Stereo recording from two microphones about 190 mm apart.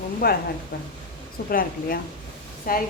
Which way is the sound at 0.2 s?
50° left (ahead or behind).